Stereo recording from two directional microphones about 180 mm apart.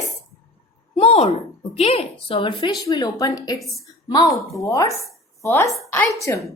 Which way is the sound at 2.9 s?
20° left (ahead or behind).